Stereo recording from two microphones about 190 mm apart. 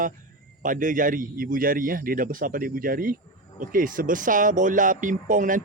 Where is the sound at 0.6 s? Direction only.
45° right (ahead or behind).